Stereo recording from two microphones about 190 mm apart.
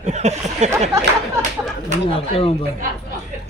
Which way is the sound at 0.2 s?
35° right (ahead or behind).